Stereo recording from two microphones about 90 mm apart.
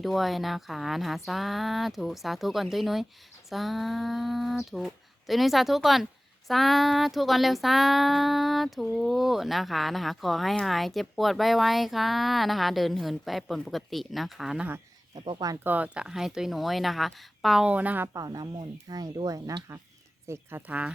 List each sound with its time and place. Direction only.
0.0 s child singing: centre (ahead or behind)
15.6 s child singing: 15° right (ahead or behind); by 17.7 s centre (ahead or behind)
17.7 s speech: 15° right (ahead or behind)
18.1 s speech: 45° right (ahead or behind)
20.2 s speech: 30° right (ahead or behind)
20.6 s speech: 15° right (ahead or behind)